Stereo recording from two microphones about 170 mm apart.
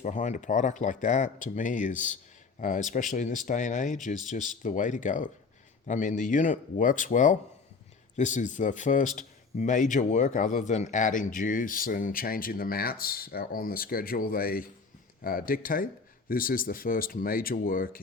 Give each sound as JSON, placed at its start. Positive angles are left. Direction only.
{"t": 0.0, "sound": "speech", "side_deg": 45}